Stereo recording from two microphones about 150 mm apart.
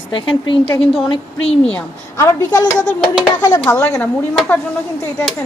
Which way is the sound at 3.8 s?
5° left (ahead or behind).